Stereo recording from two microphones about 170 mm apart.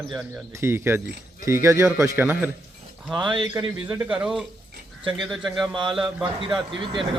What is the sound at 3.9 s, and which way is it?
A man's voice, 10° right (ahead or behind).